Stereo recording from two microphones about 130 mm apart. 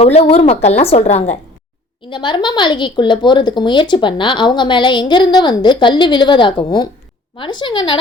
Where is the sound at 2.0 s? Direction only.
35° left (ahead or behind).